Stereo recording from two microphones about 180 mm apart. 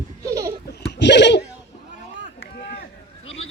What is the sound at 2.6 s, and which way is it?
Run, 60° left (ahead or behind).